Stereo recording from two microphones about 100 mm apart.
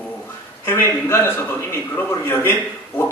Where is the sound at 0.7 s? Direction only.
25° left (ahead or behind).